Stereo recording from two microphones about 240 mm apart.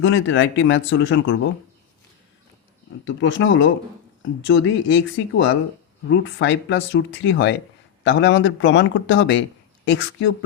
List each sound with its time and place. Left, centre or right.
0.0 s speech: left
3.0 s speech: left